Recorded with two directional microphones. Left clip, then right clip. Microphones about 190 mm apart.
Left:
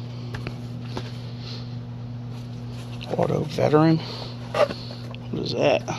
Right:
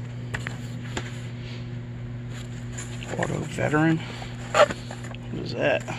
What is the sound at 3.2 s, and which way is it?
Speech, 30° left (ahead or behind).